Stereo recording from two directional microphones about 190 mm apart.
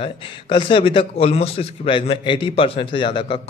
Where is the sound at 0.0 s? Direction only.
25° left (ahead or behind).